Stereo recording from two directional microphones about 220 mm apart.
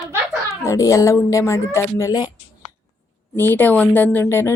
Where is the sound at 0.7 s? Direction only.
15° left (ahead or behind).